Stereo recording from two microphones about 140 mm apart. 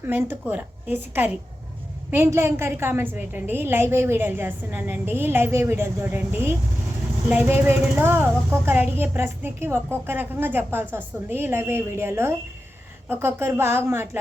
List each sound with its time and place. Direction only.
0.0 s speech: 15° right (ahead or behind)